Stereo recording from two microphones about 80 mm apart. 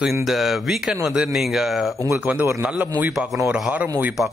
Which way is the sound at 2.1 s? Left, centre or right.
Centre.